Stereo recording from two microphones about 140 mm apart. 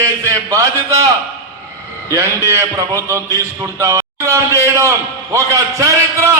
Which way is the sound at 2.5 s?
20° right (ahead or behind).